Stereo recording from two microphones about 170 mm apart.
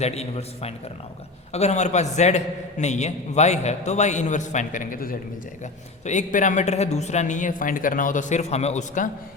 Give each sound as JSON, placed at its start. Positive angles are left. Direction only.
{"t": 0.0, "sound": "a man's voice", "side_deg": 40}